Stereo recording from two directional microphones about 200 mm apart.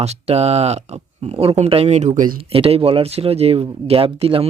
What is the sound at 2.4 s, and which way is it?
Speech, 30° right (ahead or behind).